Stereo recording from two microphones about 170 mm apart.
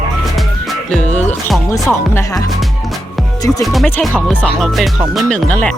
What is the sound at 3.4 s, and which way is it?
Music, 20° left (ahead or behind).